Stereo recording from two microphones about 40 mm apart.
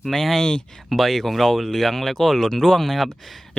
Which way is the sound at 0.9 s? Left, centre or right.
Centre.